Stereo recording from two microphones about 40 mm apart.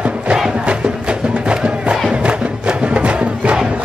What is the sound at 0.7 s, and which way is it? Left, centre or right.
Music, right.